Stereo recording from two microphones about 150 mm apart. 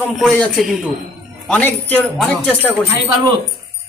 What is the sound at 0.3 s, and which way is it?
A man's voice, centre (ahead or behind).